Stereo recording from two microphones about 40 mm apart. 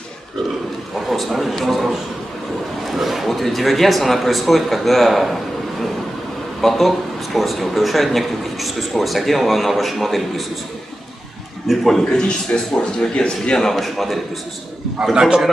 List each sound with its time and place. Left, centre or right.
0.9 s speech: centre
11.6 s speech: centre
12.1 s a man's voice: left
13.6 s speech: centre
15.1 s a man's voice: centre